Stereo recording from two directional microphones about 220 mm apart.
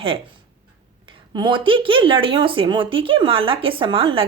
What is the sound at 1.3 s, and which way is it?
Speech, 20° right (ahead or behind).